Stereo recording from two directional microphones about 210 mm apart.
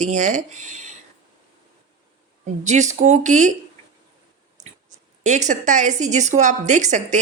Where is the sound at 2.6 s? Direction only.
35° right (ahead or behind).